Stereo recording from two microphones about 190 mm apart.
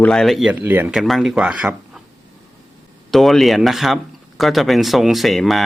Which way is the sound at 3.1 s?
Centre (ahead or behind).